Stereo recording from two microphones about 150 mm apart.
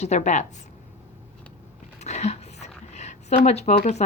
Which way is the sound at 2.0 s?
50° left (ahead or behind).